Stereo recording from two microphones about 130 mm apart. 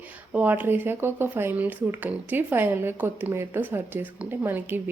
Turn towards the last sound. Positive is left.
turn(degrees=-15)  # may be behind; listen again after turning